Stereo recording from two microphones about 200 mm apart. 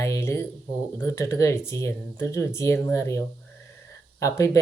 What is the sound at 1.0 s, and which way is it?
Speech, 15° left (ahead or behind).